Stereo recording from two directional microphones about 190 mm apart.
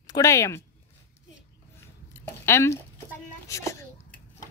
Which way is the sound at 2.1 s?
15° left (ahead or behind).